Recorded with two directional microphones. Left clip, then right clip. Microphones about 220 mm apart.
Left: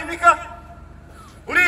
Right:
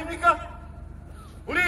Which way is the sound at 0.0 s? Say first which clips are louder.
Left 6 dB; 10° left (ahead or behind).